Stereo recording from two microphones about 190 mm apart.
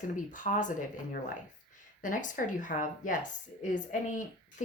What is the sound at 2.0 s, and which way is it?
Speech, 45° left (ahead or behind).